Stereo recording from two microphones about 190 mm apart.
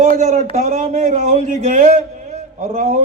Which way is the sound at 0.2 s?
40° right (ahead or behind).